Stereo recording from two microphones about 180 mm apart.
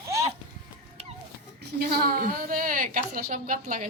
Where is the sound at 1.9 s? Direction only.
55° right (ahead or behind).